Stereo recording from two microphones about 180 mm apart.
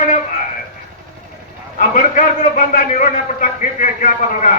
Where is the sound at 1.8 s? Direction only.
45° left (ahead or behind).